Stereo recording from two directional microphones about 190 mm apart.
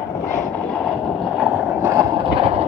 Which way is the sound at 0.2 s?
5° left (ahead or behind).